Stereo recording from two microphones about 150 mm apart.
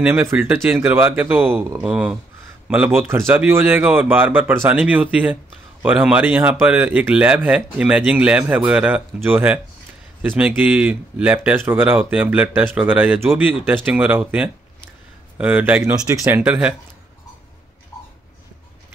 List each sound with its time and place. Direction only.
0.0 s speech: 15° right (ahead or behind)
15.9 s speech: 25° right (ahead or behind)
16.3 s speech: 10° right (ahead or behind)